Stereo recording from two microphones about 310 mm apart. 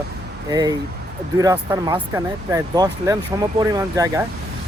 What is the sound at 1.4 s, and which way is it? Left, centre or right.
Speech, centre.